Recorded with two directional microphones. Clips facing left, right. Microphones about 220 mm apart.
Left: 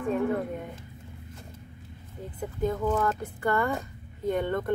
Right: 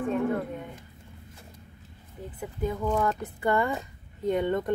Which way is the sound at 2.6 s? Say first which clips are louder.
Left 1 dB; 10° right (ahead or behind).